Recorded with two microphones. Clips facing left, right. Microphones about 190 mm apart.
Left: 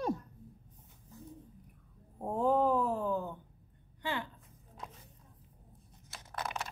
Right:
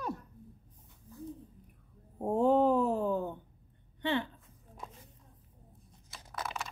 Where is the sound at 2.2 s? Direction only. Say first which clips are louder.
Right 3 dB; 25° right (ahead or behind).